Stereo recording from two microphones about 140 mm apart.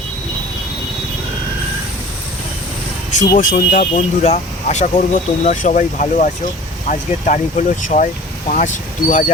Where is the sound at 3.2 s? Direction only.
65° left (ahead or behind).